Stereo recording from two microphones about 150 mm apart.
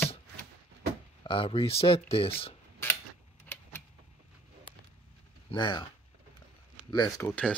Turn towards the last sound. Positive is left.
turn(degrees=10)  # may be behind; listen again after turning